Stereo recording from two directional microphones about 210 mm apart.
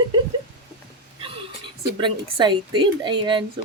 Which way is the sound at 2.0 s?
20° right (ahead or behind).